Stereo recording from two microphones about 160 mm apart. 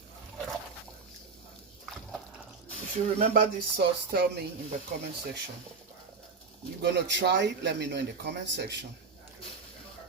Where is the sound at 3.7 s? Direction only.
90° right.